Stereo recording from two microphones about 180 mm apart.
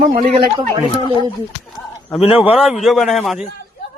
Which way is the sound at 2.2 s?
30° left (ahead or behind).